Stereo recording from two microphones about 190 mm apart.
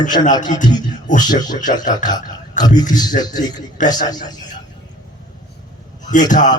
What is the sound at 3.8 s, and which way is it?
Speech, 40° left (ahead or behind).